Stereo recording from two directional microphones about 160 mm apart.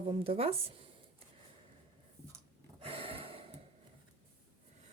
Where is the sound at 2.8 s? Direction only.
35° right (ahead or behind).